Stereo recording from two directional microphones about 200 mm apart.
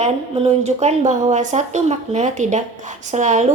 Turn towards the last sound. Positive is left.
turn(degrees=-35)  # may be behind; listen again after turning